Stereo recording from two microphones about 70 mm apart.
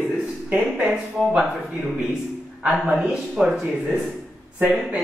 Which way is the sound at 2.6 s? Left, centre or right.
Centre.